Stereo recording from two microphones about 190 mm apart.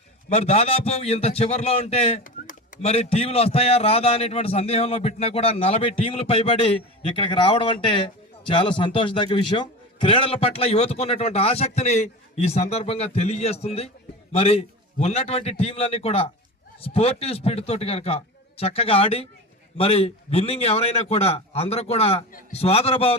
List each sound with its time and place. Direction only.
0.3 s a man's voice: 30° left (ahead or behind)